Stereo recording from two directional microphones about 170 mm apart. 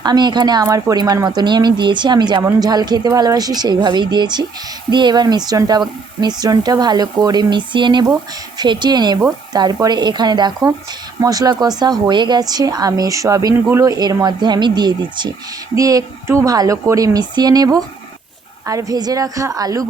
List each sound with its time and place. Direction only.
0.0 s speech: 25° right (ahead or behind)